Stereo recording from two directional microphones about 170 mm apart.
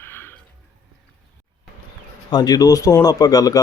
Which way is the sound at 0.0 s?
15° left (ahead or behind).